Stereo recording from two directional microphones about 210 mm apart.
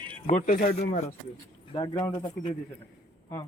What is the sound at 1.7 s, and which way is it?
Speech, 20° left (ahead or behind).